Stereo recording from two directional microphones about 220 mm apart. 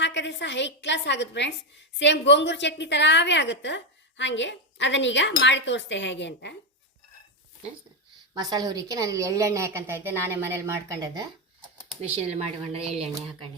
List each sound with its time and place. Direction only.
0.0 s a woman's voice: 55° left (ahead or behind)
8.4 s a woman's voice: 15° right (ahead or behind)
11.9 s speech: 25° right (ahead or behind)